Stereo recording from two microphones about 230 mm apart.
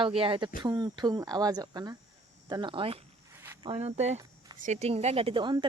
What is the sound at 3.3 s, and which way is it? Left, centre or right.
Cricket, centre.